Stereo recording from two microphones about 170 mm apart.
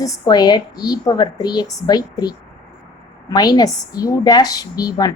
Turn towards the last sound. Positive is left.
turn(degrees=20)  # may be behind; listen again after turning